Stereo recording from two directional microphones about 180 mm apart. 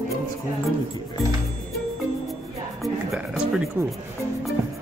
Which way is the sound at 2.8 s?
Centre (ahead or behind).